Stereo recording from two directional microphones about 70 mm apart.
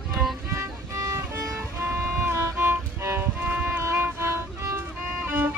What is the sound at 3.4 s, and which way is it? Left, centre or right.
Music, right.